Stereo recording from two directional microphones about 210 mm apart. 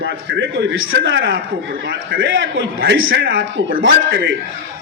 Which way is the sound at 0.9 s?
55° right (ahead or behind).